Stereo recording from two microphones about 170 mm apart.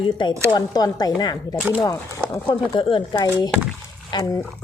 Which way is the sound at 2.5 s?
30° left (ahead or behind).